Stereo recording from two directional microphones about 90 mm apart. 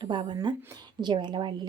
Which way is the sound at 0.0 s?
60° right (ahead or behind).